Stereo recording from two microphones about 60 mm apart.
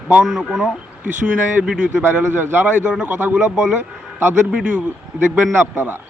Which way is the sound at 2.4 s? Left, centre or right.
Right.